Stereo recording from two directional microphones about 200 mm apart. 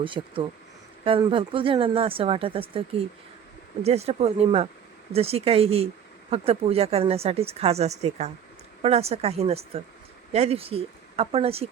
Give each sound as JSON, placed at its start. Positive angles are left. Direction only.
{"t": 0.0, "sound": "speech", "side_deg": -25}
{"t": 3.8, "sound": "a woman's voice", "side_deg": -30}